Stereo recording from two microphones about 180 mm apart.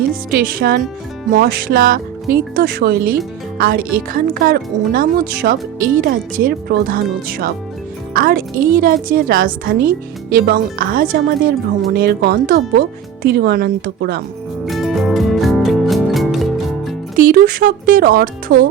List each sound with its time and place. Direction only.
0.1 s speech: 55° right (ahead or behind)
14.7 s music: centre (ahead or behind)
17.2 s speech: 50° right (ahead or behind)